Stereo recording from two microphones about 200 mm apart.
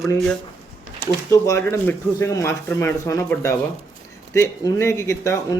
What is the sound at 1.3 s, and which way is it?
A man's voice, 15° left (ahead or behind).